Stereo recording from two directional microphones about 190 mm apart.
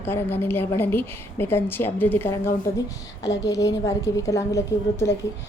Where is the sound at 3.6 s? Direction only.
15° left (ahead or behind).